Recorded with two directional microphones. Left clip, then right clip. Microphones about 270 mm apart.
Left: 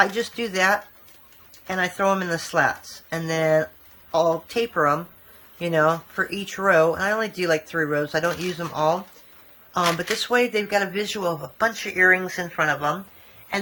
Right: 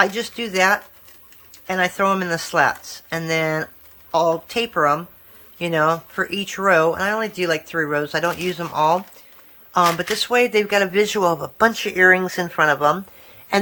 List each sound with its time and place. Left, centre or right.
0.0 s a man's voice: centre